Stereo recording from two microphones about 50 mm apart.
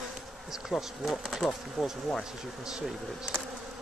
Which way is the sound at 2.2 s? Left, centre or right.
Centre.